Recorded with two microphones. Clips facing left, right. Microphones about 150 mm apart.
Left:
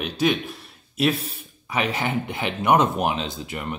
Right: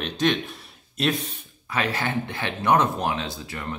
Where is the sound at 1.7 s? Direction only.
15° left (ahead or behind).